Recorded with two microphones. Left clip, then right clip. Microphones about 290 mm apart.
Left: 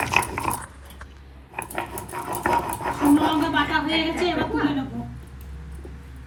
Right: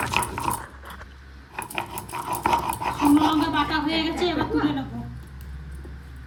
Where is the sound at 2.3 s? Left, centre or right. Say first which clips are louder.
Even; right.